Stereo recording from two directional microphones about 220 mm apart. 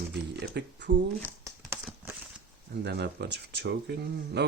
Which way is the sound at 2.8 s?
50° right (ahead or behind).